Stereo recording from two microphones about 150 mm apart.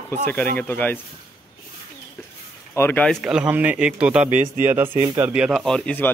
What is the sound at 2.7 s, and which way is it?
Speech, 15° left (ahead or behind).